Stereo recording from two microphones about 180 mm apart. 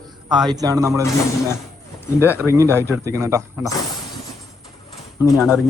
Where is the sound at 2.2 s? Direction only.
10° right (ahead or behind).